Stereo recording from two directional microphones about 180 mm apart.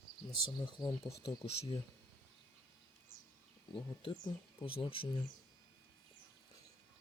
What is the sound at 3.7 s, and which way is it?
Speech, 25° left (ahead or behind).